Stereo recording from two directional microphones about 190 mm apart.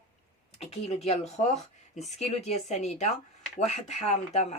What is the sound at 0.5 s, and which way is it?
Speech, 30° left (ahead or behind).